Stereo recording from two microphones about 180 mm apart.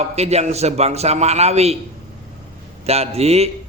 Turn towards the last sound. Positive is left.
turn(degrees=-35)  # may be behind; listen again after turning